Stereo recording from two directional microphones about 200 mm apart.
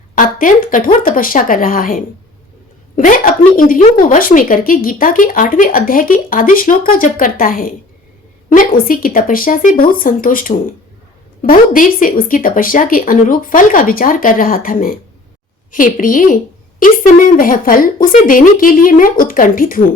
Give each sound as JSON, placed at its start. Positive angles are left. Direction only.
{"t": 0.2, "sound": "a woman's voice", "side_deg": 45}